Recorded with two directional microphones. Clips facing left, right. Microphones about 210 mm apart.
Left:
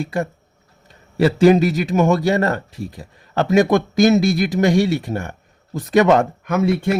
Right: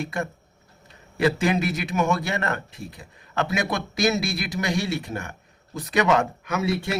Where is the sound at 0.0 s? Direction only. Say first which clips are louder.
Left 6 dB; 35° left (ahead or behind).